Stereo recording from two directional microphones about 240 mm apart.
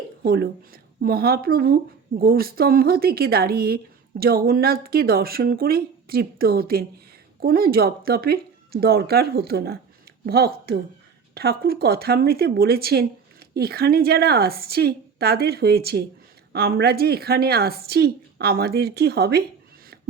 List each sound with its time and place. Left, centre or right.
0.2 s speech: right